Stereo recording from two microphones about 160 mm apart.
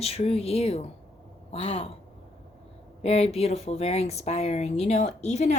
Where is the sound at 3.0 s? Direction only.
40° left (ahead or behind).